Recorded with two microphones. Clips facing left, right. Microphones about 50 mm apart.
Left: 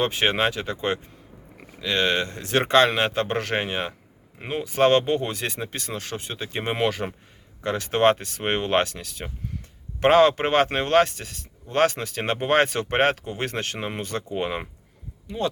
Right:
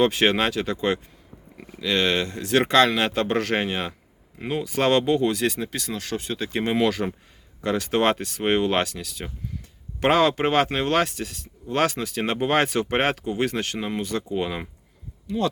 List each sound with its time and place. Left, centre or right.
0.0 s speech: left